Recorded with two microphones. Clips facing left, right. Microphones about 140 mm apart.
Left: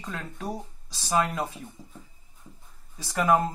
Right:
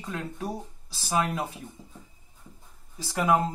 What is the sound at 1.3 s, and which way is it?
Speech, 15° right (ahead or behind).